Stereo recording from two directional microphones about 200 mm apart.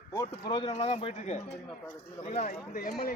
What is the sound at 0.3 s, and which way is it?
A man's voice, 25° left (ahead or behind).